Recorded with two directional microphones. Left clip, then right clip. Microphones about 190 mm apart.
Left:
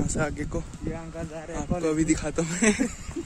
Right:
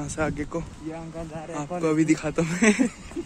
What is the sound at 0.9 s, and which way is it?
Speech, 55° left (ahead or behind).